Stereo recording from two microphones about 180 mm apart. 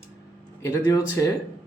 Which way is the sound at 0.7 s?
15° left (ahead or behind).